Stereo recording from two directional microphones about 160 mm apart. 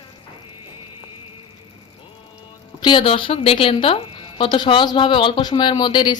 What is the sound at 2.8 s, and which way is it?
A woman's voice, 30° left (ahead or behind).